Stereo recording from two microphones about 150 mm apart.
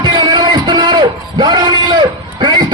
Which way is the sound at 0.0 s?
30° right (ahead or behind).